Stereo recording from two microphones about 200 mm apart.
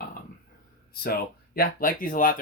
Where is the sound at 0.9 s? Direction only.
50° left (ahead or behind).